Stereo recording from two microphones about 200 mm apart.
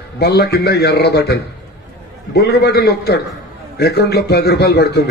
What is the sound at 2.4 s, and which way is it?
A man's voice, 55° left (ahead or behind).